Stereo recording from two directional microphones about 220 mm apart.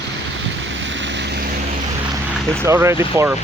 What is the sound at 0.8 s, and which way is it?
Vehicle, 55° right (ahead or behind).